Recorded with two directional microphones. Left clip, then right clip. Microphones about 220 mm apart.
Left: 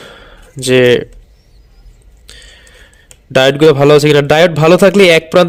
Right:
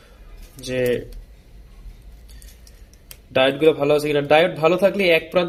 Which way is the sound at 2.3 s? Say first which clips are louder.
Left 17 dB; 55° left (ahead or behind).